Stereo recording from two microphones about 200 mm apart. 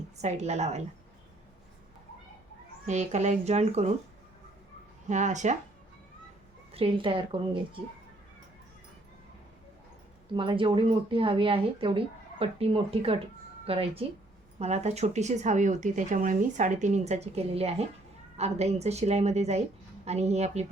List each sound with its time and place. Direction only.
0.2 s speech: 35° right (ahead or behind)
2.8 s speech: 35° right (ahead or behind)
5.0 s speech: 35° right (ahead or behind)
6.7 s speech: 30° right (ahead or behind)
10.3 s speech: 25° right (ahead or behind)